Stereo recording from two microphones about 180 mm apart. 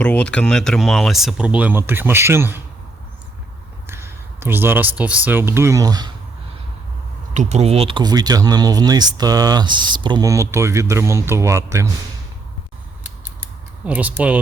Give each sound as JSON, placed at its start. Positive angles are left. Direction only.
{"t": 0.0, "sound": "speech", "side_deg": 5}
{"t": 3.8, "sound": "speech", "side_deg": -15}
{"t": 7.3, "sound": "speech", "side_deg": -35}
{"t": 13.4, "sound": "typing", "side_deg": -10}